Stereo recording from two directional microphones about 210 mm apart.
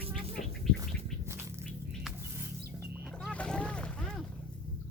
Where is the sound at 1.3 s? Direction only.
10° right (ahead or behind).